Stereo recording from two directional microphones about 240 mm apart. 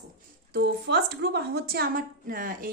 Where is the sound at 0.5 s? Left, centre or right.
Right.